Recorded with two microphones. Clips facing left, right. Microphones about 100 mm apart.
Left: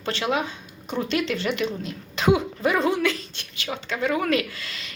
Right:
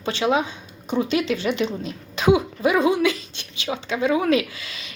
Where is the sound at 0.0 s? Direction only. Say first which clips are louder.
Right 4 dB; 20° right (ahead or behind).